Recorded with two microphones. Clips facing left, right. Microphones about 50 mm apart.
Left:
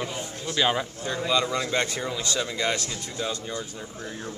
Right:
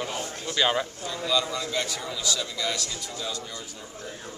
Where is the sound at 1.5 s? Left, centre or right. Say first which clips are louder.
Left 4 dB; left.